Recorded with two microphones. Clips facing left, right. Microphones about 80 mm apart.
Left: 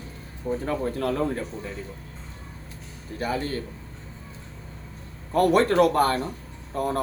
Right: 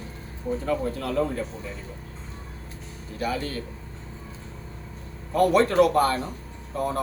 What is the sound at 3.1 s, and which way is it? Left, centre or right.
Speech, left.